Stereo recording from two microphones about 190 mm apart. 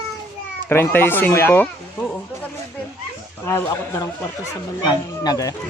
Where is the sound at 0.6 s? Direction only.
10° left (ahead or behind).